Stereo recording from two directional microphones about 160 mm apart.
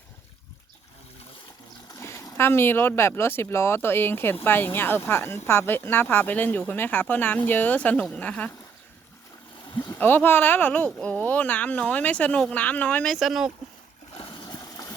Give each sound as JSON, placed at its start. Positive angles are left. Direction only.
{"t": 2.0, "sound": "speech", "side_deg": 15}
{"t": 9.7, "sound": "a sound", "side_deg": 25}
{"t": 10.0, "sound": "speech", "side_deg": 10}
{"t": 14.2, "sound": "horse", "side_deg": 30}